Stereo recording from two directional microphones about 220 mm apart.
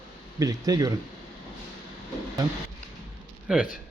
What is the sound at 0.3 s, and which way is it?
Speech, 15° right (ahead or behind).